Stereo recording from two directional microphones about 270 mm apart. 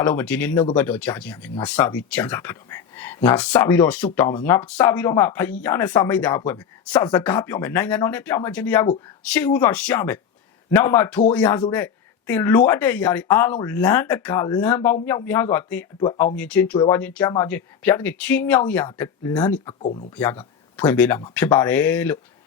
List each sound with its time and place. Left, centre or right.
0.0 s speech: centre
19.8 s speech: left
20.1 s speech: centre